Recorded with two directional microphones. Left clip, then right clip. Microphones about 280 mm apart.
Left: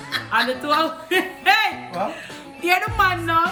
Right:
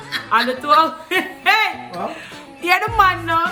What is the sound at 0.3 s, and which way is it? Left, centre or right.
A woman's voice, centre.